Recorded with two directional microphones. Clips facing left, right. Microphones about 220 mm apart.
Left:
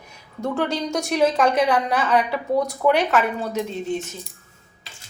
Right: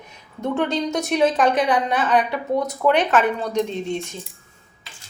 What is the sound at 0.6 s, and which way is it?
Speech, 20° right (ahead or behind).